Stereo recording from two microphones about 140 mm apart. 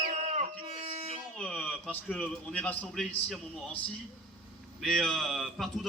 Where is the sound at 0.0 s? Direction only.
55° right (ahead or behind).